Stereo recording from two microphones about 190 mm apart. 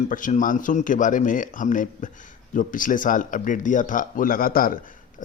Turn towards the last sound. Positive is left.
turn(degrees=50)  # may be behind; listen again after turning